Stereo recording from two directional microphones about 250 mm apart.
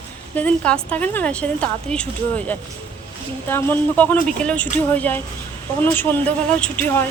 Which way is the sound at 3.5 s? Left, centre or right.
Centre.